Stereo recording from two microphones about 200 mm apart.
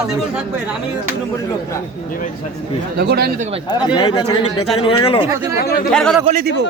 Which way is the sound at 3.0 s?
55° right (ahead or behind).